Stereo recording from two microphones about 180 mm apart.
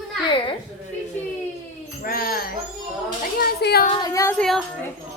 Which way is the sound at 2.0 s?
55° left (ahead or behind).